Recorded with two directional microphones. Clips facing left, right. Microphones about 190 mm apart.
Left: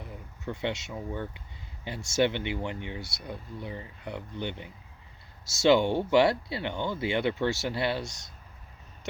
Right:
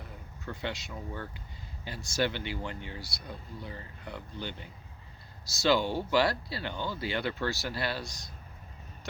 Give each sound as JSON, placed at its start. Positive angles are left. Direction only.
{"t": 0.0, "sound": "speech", "side_deg": 25}